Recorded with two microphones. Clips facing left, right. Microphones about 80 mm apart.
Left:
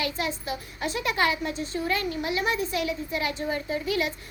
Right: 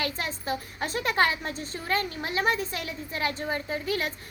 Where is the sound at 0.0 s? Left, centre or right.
Right.